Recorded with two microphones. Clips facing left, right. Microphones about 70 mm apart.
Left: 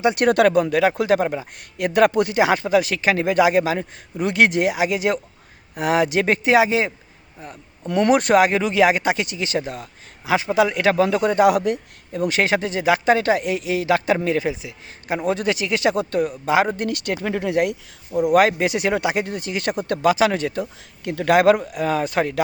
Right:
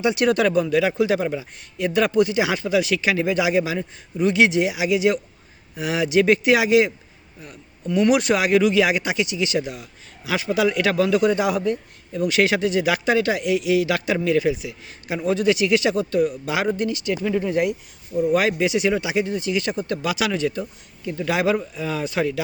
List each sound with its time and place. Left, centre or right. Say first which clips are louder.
0.0 s speech: left 3 dB; left
1.8 s speech: left 2 dB; left
7.9 s speech: even; left
8.1 s speech: left 5 dB; left
10.2 s speech: left 3 dB; left
12.1 s speech: even; left
16.7 s speech: right 1 dB; left
18.3 s speech: left 6 dB; left
20.1 s speech: left 3 dB; left
21.0 s speech: left 6 dB; left